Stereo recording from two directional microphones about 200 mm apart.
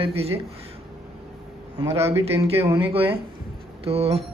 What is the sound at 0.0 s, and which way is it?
Speech, 30° right (ahead or behind).